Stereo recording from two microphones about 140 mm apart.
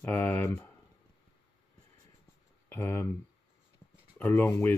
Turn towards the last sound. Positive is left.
turn(degrees=20)  # may be behind; listen again after turning